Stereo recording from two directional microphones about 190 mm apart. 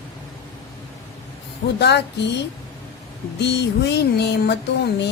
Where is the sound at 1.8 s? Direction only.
60° left (ahead or behind).